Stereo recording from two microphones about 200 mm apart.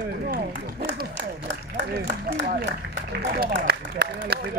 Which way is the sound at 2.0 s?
60° right (ahead or behind).